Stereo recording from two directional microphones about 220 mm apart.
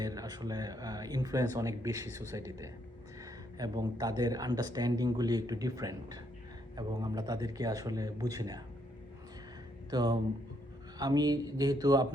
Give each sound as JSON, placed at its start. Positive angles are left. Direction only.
{"t": 0.0, "sound": "speech", "side_deg": -15}
{"t": 9.9, "sound": "speech", "side_deg": -20}